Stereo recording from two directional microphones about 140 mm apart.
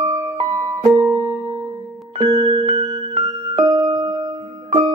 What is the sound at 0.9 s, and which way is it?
Music, 20° right (ahead or behind).